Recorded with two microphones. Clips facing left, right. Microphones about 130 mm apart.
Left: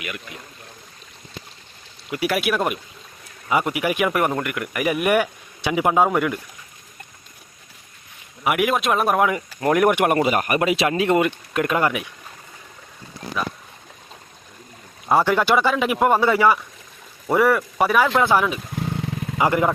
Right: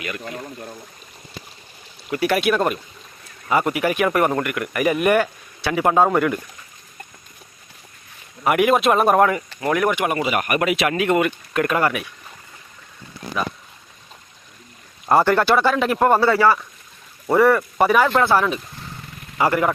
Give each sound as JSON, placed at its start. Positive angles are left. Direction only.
{"t": 2.0, "sound": "speech", "side_deg": 5}
{"t": 8.4, "sound": "speech", "side_deg": 0}
{"t": 9.6, "sound": "speech", "side_deg": 50}
{"t": 10.4, "sound": "speech", "side_deg": 25}
{"t": 15.1, "sound": "speech", "side_deg": 5}
{"t": 18.8, "sound": "motorcycle", "side_deg": 80}
{"t": 19.4, "sound": "speech", "side_deg": 20}